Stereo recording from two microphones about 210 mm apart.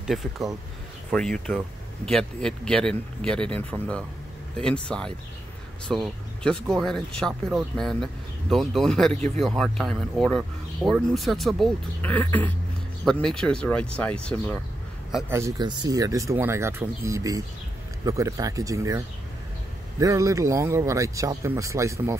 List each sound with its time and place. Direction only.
0.0 s a man's voice: centre (ahead or behind)
15.3 s speech: 15° right (ahead or behind)